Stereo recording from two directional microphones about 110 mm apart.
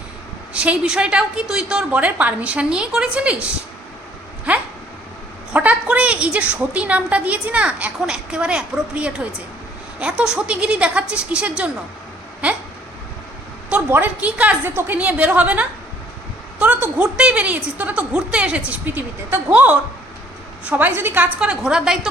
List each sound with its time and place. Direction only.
0.5 s a woman's voice: 10° right (ahead or behind)
5.5 s a woman's voice: 10° right (ahead or behind)
13.7 s a woman's voice: 15° right (ahead or behind)
21.3 s a woman's voice: 10° right (ahead or behind)